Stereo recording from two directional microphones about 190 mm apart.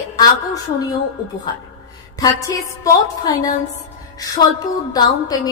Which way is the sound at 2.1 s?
20° left (ahead or behind).